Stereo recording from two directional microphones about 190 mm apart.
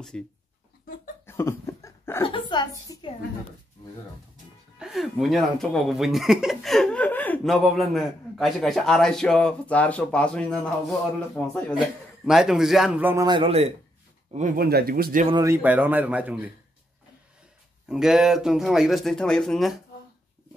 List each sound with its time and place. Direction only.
0.1 s speech: 5° left (ahead or behind)
1.2 s a sound: 15° left (ahead or behind)
2.2 s a woman's voice: 25° left (ahead or behind)
4.7 s a man's voice: centre (ahead or behind); by 13.7 s 35° right (ahead or behind)
14.6 s speech: 55° right (ahead or behind)
15.4 s a man's voice: 10° right (ahead or behind)
17.8 s speech: 5° right (ahead or behind)